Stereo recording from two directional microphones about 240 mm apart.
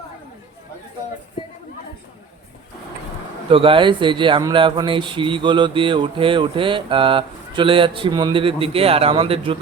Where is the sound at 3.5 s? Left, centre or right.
Right.